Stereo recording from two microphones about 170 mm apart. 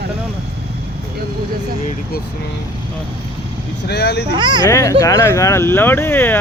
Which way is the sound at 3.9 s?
75° left (ahead or behind).